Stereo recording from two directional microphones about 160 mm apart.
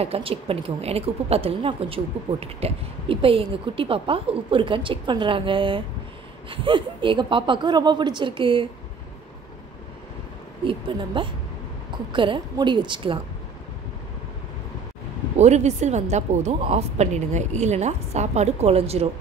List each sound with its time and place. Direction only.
0.0 s speech: 35° right (ahead or behind)
10.6 s speech: 30° right (ahead or behind)
15.3 s a woman's voice: 45° right (ahead or behind)